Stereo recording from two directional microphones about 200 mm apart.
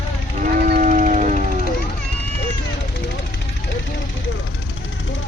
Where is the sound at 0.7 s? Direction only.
40° right (ahead or behind).